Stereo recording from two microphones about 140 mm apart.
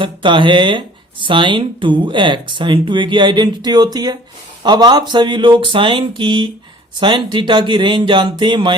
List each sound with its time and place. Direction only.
0.0 s speech: 35° right (ahead or behind)